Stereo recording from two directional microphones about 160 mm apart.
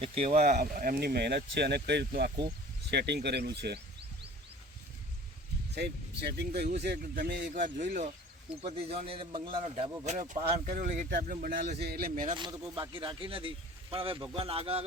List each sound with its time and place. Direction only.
0.6 s speech: 65° right (ahead or behind); by 3.8 s 90° right
5.7 s speech: 90° right
6.8 s speech: 75° right (ahead or behind); by 8.1 s 50° right (ahead or behind)
8.6 s a man's voice: 40° right (ahead or behind)
10.1 s speech: 50° right (ahead or behind)
11.1 s speech: 60° right (ahead or behind)
12.3 s a man's voice: 25° right (ahead or behind)